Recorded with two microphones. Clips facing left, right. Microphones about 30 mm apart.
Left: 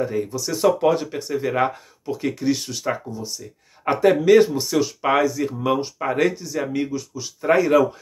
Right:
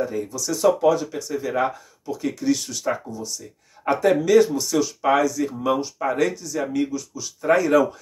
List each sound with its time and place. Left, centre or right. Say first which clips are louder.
0.0 s speech: left 2 dB; left
2.4 s speech: right 1 dB; left
4.0 s speech: left 2 dB; left; by 7.8 s centre